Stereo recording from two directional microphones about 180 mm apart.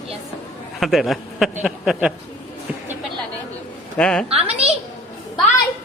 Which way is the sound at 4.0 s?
5° left (ahead or behind).